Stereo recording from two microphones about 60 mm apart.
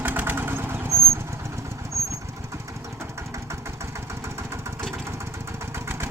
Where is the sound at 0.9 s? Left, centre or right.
Right.